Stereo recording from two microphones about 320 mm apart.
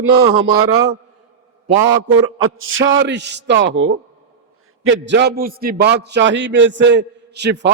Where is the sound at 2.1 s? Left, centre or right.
Right.